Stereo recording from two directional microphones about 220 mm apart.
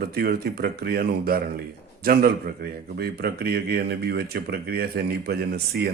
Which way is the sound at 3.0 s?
45° right (ahead or behind).